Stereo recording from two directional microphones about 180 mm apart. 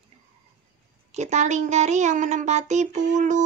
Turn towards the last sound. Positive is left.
turn(degrees=-45)  # may be behind; listen again after turning